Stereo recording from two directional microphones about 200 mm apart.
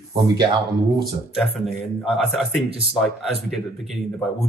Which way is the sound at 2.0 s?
Centre (ahead or behind).